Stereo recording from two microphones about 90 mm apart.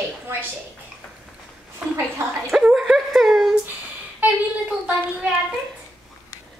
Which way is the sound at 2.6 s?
10° right (ahead or behind).